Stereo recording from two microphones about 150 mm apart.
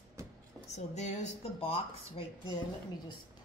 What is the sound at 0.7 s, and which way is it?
Speech, 50° left (ahead or behind).